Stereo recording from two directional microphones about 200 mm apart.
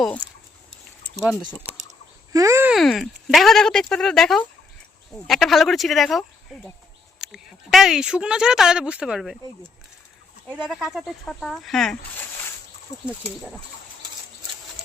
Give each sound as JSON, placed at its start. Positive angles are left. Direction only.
{"t": 2.3, "sound": "speech", "side_deg": -15}
{"t": 2.7, "sound": "speech", "side_deg": 0}
{"t": 10.5, "sound": "speech", "side_deg": -5}
{"t": 12.9, "sound": "speech", "side_deg": 35}
{"t": 13.2, "sound": "speech", "side_deg": 0}